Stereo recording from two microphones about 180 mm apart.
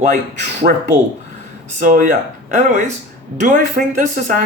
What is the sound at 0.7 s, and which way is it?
Speech, 55° right (ahead or behind).